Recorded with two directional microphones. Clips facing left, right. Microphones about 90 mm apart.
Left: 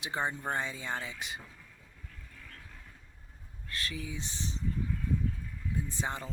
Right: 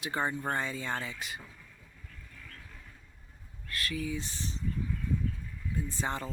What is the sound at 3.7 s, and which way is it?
Speech, 30° left (ahead or behind).